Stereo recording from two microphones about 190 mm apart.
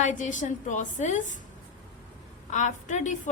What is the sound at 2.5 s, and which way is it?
Speech, 40° left (ahead or behind).